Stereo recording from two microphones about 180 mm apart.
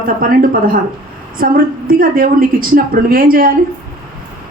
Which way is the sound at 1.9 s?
50° right (ahead or behind).